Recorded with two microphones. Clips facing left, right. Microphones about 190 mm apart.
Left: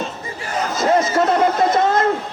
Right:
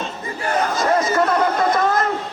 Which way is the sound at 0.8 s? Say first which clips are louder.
Left 4 dB; 25° left (ahead or behind).